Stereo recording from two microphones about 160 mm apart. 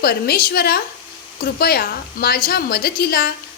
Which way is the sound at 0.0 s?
75° left (ahead or behind).